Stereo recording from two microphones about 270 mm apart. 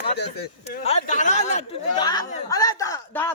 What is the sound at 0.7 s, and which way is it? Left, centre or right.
A man's voice, left.